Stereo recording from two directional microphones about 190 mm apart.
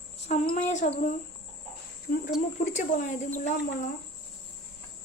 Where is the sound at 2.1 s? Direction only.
50° left (ahead or behind).